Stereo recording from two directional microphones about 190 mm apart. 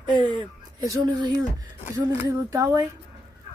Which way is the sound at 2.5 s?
15° right (ahead or behind).